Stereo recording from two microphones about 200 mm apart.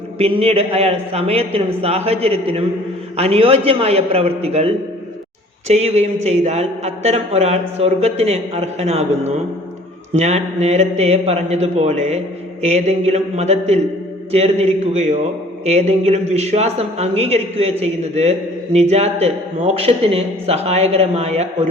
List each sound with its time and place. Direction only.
0.2 s a man's voice: 30° right (ahead or behind)